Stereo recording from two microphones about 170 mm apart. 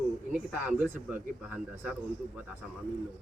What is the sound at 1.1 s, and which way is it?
Speech, 10° right (ahead or behind).